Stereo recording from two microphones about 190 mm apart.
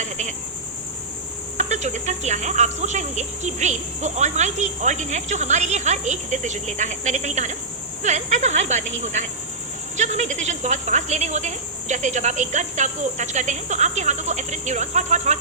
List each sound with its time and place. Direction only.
0.0 s speech: 40° right (ahead or behind)
1.5 s speech: 40° right (ahead or behind)
10.0 s speech: 40° right (ahead or behind)